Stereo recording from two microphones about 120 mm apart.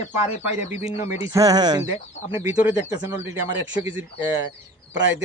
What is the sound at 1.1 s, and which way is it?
Speech, 25° right (ahead or behind).